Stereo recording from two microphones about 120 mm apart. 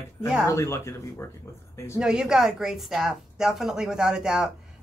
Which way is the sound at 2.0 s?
5° right (ahead or behind).